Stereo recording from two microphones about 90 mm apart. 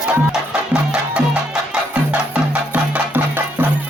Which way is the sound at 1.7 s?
15° right (ahead or behind).